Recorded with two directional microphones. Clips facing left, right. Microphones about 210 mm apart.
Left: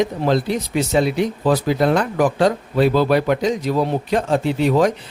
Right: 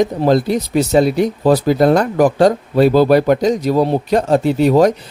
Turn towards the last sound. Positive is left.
turn(degrees=-40)  # may be behind; listen again after turning